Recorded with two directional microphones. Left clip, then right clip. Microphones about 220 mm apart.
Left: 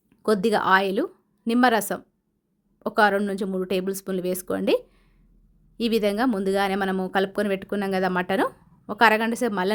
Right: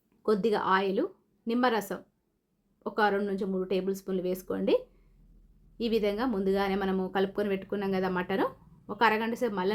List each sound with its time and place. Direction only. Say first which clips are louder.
0.2 s speech: left 5 dB; 50° left (ahead or behind)